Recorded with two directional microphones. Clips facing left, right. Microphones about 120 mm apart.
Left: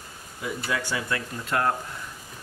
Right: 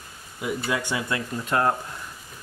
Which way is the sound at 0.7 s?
15° right (ahead or behind).